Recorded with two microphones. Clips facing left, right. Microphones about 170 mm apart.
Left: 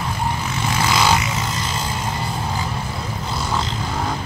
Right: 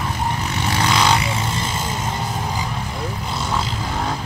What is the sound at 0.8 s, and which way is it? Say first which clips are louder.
Vehicle: even; 5° left (ahead or behind).